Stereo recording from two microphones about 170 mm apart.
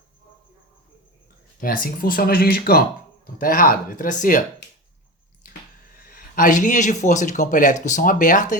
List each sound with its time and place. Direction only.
1.6 s speech: 55° left (ahead or behind)
6.0 s speech: 55° left (ahead or behind)